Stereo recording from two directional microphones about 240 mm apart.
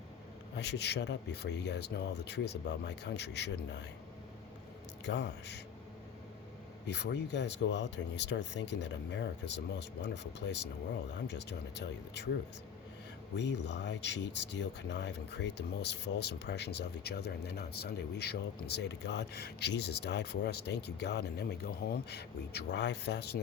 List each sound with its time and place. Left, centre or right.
0.5 s speech: left
5.0 s speech: left
6.8 s speech: left
13.3 s speech: left